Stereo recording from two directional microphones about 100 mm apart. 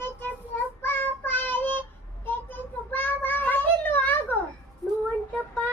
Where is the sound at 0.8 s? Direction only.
20° left (ahead or behind).